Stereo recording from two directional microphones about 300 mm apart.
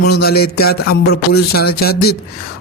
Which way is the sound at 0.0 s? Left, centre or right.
Left.